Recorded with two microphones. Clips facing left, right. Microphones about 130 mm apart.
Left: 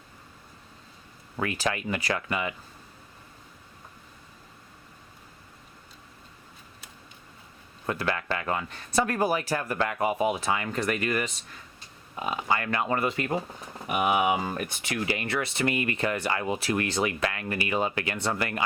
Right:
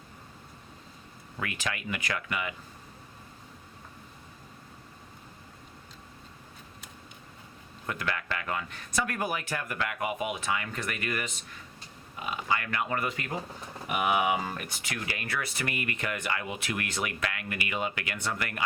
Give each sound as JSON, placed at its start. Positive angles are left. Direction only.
{"t": 1.4, "sound": "speech", "side_deg": 35}
{"t": 7.9, "sound": "speech", "side_deg": 30}